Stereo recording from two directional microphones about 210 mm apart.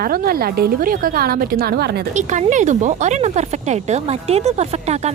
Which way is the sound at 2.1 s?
35° right (ahead or behind).